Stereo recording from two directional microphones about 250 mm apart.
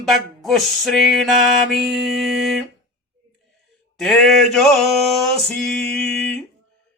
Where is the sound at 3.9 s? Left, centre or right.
Centre.